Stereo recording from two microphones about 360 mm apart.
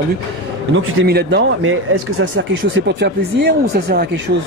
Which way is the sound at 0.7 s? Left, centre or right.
Right.